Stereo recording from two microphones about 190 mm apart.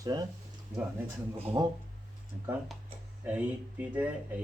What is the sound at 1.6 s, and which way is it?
Speech, 20° right (ahead or behind).